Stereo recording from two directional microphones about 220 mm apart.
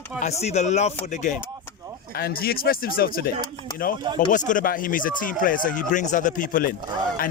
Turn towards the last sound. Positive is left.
turn(degrees=40)  # may be behind; listen again after turning